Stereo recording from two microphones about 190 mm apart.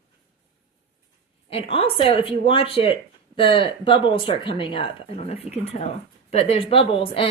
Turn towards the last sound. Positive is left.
turn(degrees=30)  # may be behind; listen again after turning